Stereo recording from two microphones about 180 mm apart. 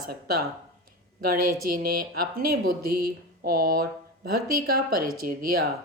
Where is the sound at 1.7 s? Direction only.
55° right (ahead or behind).